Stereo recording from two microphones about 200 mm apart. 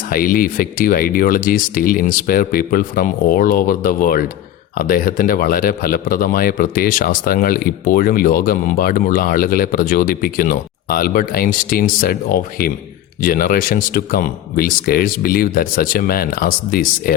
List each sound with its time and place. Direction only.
0.1 s speech: 45° left (ahead or behind)